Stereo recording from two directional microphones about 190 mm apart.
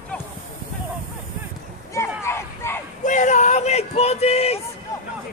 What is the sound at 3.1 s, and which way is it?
Speech, 40° left (ahead or behind).